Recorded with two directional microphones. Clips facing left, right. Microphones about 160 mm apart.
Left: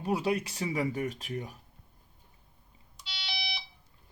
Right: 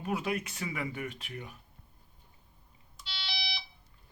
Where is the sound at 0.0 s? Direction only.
35° left (ahead or behind).